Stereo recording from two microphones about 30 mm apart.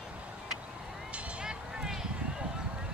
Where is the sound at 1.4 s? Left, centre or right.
Right.